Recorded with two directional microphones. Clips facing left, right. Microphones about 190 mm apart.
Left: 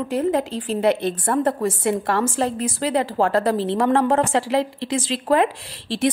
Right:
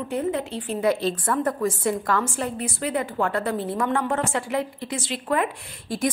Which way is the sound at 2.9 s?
30° left (ahead or behind).